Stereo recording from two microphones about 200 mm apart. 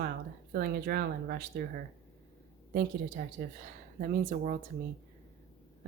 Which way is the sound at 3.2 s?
45° right (ahead or behind).